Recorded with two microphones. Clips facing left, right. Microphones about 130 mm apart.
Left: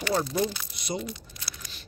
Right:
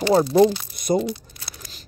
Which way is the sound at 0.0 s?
30° right (ahead or behind).